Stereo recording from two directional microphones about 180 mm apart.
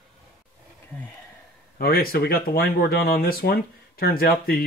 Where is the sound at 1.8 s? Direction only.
55° left (ahead or behind).